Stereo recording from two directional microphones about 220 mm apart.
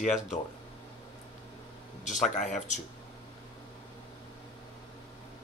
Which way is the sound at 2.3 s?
35° left (ahead or behind).